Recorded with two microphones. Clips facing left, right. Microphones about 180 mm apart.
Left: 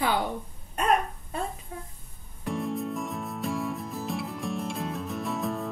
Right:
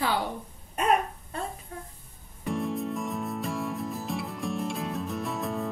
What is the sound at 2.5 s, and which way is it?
Music, centre (ahead or behind).